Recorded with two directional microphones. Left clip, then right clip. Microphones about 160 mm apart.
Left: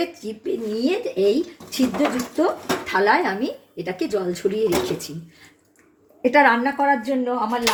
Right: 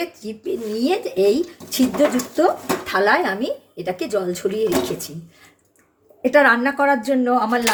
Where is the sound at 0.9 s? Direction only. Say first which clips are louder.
Right 2 dB; 25° right (ahead or behind).